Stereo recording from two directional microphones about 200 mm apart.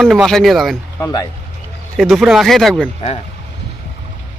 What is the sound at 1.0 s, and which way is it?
Speech, 20° left (ahead or behind).